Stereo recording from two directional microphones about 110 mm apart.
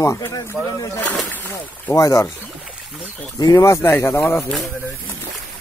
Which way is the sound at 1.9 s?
30° left (ahead or behind).